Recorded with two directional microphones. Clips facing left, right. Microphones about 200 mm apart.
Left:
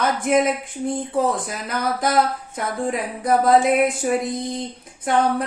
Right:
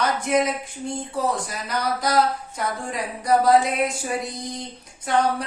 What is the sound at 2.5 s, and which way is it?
Speech, 55° left (ahead or behind).